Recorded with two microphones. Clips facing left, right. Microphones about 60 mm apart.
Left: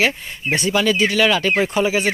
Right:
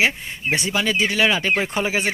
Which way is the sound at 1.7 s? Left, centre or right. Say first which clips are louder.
Left 4 dB; right.